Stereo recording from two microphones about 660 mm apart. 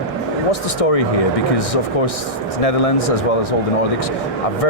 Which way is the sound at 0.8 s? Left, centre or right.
Left.